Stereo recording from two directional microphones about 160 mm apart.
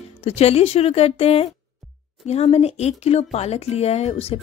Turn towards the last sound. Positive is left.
turn(degrees=40)  # may be behind; listen again after turning